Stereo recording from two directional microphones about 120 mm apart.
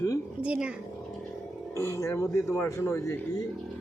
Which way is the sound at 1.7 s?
25° left (ahead or behind).